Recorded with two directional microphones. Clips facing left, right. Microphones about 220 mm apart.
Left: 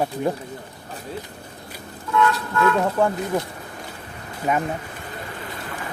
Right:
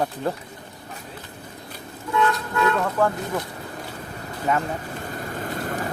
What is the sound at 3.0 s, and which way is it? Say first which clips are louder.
Speech: left 2 dB; 20° left (ahead or behind).